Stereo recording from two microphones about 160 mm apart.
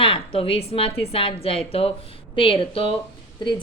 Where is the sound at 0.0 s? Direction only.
35° left (ahead or behind).